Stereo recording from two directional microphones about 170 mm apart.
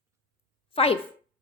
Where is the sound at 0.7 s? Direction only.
35° left (ahead or behind).